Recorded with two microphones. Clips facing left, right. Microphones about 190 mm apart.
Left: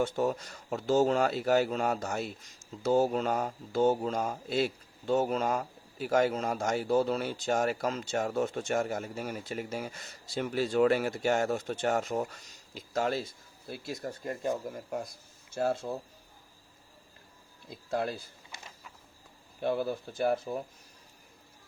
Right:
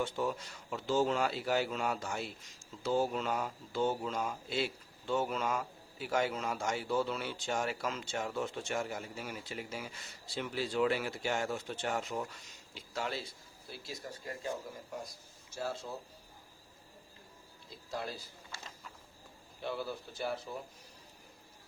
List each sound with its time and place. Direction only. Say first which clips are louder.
0.0 s speech: left 6 dB; 45° left (ahead or behind)
13.7 s speech: left 7 dB; 55° left (ahead or behind)
17.7 s speech: left 8 dB; 55° left (ahead or behind)
18.5 s a sound: even; 20° left (ahead or behind)
19.6 s speech: left 8 dB; 50° left (ahead or behind)